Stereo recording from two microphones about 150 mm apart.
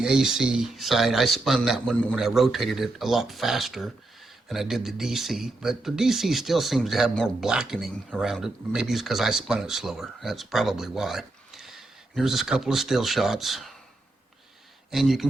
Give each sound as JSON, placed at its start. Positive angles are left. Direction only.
{"t": 0.0, "sound": "speech", "side_deg": -5}
{"t": 14.8, "sound": "speech", "side_deg": 0}